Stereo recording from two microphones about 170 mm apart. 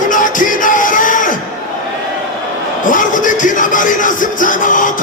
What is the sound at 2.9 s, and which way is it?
Music, 50° left (ahead or behind).